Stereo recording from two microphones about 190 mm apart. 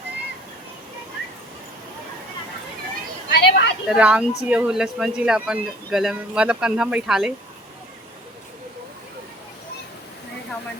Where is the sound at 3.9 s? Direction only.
5° right (ahead or behind).